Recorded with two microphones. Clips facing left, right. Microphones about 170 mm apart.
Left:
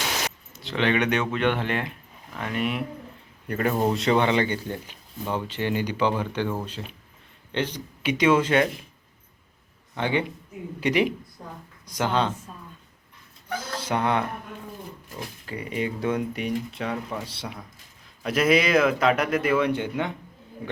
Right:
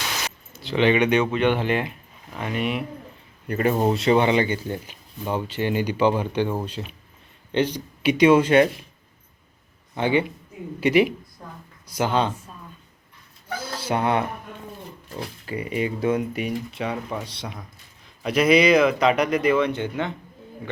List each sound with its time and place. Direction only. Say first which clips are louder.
0.5 s speech: right 5 dB; centre (ahead or behind)
3.5 s speech: right 3 dB; 15° right (ahead or behind)
9.9 s speech: right 4 dB; 10° right (ahead or behind)
13.5 s a sound: right 1 dB; 10° right (ahead or behind)
14.0 s speech: right 2 dB; 10° right (ahead or behind)
15.4 s speech: right 3 dB; 10° right (ahead or behind); by 20.1 s 10° left (ahead or behind)